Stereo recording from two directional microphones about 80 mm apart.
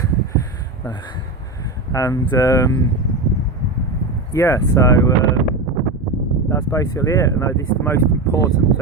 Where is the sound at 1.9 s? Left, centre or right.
Left.